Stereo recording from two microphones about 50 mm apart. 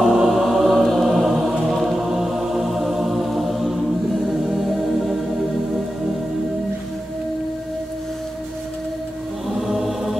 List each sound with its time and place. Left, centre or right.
0.1 s music: centre
9.7 s choir: centre